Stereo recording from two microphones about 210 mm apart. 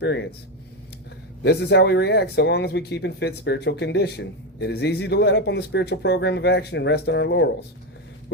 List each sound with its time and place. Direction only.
0.0 s speech: 55° left (ahead or behind)
1.5 s speech: 55° left (ahead or behind)